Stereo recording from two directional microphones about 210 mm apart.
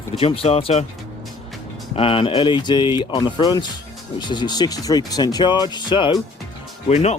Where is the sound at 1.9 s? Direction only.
25° left (ahead or behind).